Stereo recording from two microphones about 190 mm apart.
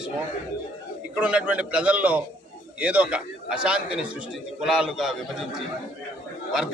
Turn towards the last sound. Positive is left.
turn(degrees=-5)  # may be behind; listen again after turning